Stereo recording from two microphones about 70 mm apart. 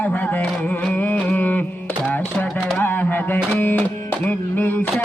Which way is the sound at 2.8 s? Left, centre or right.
Left.